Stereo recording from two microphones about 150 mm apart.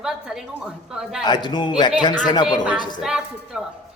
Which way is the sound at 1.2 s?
30° left (ahead or behind).